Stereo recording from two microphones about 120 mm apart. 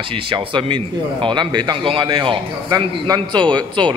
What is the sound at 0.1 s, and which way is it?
A man's voice, 45° right (ahead or behind).